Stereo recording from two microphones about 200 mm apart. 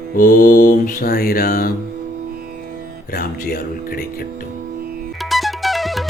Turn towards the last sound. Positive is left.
turn(degrees=0)  # may be behind; listen again after turning